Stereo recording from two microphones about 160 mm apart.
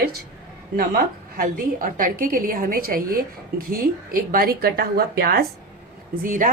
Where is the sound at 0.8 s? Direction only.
65° right (ahead or behind).